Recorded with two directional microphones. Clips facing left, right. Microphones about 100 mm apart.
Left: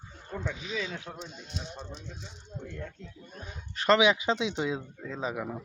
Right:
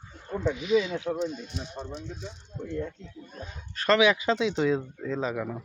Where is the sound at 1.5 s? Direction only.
5° right (ahead or behind).